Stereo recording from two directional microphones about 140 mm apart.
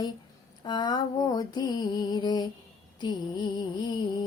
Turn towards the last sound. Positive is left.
turn(degrees=30)  # may be behind; listen again after turning